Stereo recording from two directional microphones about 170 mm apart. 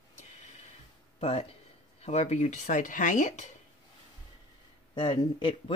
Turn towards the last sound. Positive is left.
turn(degrees=30)  # may be behind; listen again after turning